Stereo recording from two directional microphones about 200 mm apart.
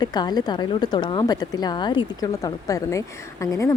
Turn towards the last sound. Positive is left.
turn(degrees=15)  # may be behind; listen again after turning